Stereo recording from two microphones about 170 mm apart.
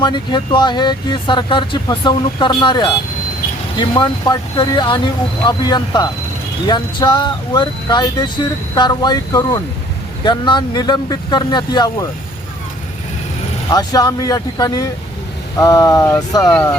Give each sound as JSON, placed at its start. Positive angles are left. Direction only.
{"t": 0.0, "sound": "speech", "side_deg": 25}
{"t": 13.7, "sound": "speech", "side_deg": 20}